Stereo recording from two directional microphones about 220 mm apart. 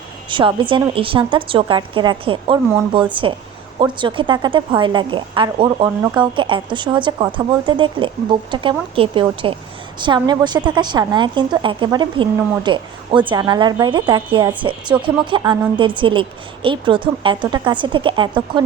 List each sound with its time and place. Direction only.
0.3 s speech: 20° right (ahead or behind)